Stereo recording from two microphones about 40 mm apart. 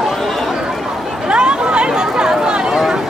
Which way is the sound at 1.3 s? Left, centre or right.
Right.